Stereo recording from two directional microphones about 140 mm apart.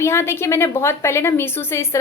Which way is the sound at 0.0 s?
20° left (ahead or behind).